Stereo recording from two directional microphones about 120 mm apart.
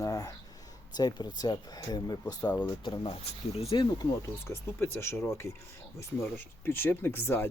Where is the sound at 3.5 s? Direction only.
55° left (ahead or behind).